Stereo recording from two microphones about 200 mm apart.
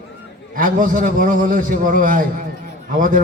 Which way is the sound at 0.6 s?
45° right (ahead or behind).